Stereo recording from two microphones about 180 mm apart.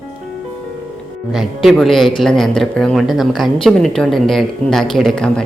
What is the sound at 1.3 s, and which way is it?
Speech, centre (ahead or behind).